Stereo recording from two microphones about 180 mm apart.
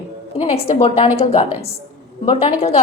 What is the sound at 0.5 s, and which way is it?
A woman's voice, 35° left (ahead or behind).